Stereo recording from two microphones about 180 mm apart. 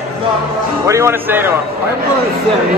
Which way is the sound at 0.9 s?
15° right (ahead or behind).